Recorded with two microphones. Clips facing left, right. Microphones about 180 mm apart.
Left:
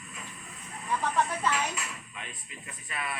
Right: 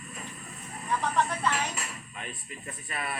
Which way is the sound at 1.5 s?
40° right (ahead or behind).